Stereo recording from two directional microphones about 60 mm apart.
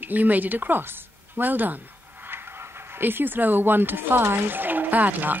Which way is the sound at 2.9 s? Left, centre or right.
Right.